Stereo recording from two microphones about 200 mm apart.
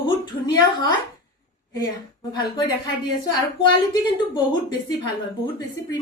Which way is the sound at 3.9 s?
20° left (ahead or behind).